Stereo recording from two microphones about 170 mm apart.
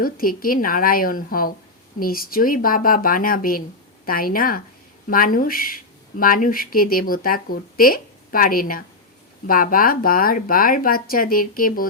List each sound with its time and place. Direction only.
0.0 s speech: 55° left (ahead or behind)